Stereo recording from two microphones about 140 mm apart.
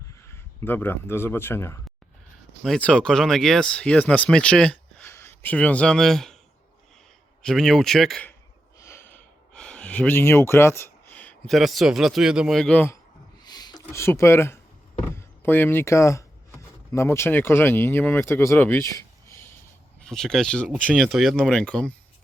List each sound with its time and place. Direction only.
0.2 s speech: 20° left (ahead or behind)
2.6 s speech: 5° left (ahead or behind)
5.0 s speech: 20° left (ahead or behind)
7.4 s a man's voice: 5° left (ahead or behind)
9.6 s a sound: 5° left (ahead or behind)
11.4 s a man's voice: centre (ahead or behind)
13.4 s a sound: 30° left (ahead or behind)
13.9 s speech: 20° left (ahead or behind)
20.0 s a man's voice: 5° left (ahead or behind)